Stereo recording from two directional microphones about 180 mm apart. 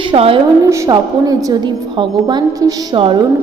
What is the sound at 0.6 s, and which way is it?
A woman's voice, 15° right (ahead or behind).